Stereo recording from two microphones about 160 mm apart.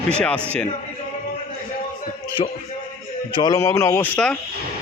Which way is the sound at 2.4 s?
40° left (ahead or behind).